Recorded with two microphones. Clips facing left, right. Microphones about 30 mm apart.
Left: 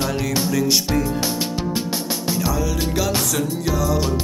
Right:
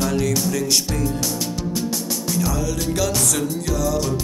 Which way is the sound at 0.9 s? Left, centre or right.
Left.